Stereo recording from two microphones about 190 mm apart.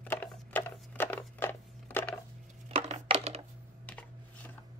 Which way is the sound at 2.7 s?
35° right (ahead or behind).